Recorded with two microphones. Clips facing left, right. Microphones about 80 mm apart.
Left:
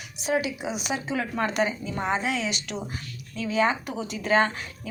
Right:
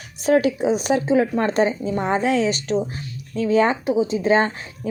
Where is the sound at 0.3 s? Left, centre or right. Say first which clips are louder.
Right 10 dB; right.